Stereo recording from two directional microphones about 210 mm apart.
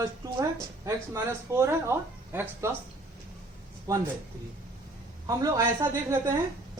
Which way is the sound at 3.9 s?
15° right (ahead or behind).